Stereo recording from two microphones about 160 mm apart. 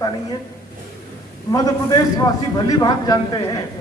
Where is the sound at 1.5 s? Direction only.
25° left (ahead or behind).